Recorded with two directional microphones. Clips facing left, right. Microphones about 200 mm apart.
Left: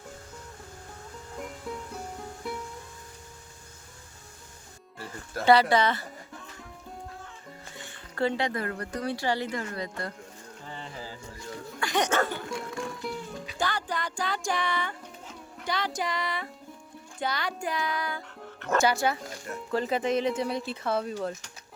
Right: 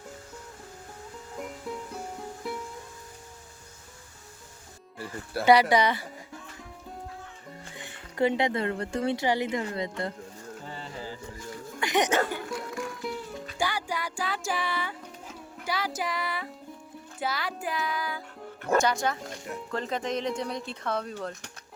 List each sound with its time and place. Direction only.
1.4 s music: centre (ahead or behind)
4.9 s speech: 10° right (ahead or behind)
7.8 s speech: 15° right (ahead or behind)
11.1 s a sound: 20° right (ahead or behind)
12.5 s music: 25° left (ahead or behind)
13.0 s music: centre (ahead or behind)
17.2 s speech: 5° right (ahead or behind)